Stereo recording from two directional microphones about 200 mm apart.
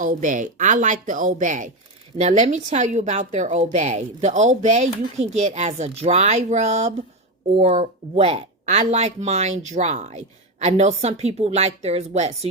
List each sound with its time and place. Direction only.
0.0 s speech: 40° right (ahead or behind)